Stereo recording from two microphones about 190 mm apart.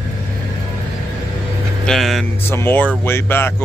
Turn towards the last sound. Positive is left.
turn(degrees=10)  # may be behind; listen again after turning